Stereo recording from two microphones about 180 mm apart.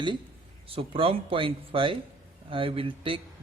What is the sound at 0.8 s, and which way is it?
Speech, 30° right (ahead or behind).